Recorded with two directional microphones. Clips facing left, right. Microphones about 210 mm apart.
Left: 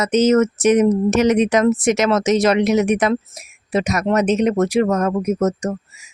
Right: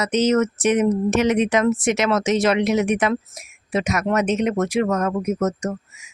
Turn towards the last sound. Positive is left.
turn(degrees=35)  # may be behind; listen again after turning